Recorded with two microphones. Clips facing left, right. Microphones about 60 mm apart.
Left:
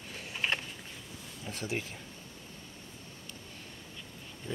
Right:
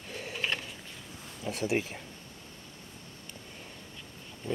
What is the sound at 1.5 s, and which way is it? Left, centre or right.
Speech, centre.